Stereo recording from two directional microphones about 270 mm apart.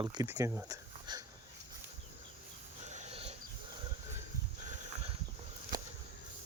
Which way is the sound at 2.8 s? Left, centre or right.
Right.